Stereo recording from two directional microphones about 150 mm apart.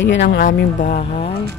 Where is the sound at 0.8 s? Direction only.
45° left (ahead or behind).